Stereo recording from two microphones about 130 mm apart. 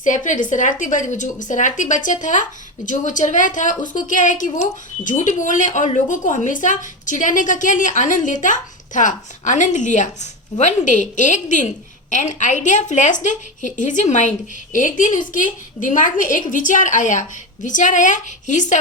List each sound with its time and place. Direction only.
0.0 s a woman's voice: 80° left